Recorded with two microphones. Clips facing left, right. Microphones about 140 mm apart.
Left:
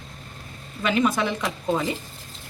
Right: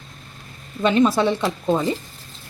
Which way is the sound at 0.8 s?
30° right (ahead or behind).